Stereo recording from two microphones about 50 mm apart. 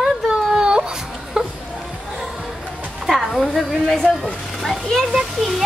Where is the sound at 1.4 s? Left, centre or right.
Centre.